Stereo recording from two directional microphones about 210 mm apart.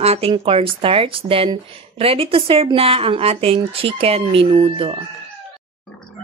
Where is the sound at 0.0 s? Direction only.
30° right (ahead or behind).